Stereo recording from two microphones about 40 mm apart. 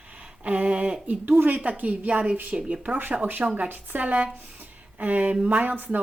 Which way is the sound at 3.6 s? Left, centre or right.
Right.